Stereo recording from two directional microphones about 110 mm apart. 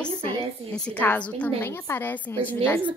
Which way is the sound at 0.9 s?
15° left (ahead or behind).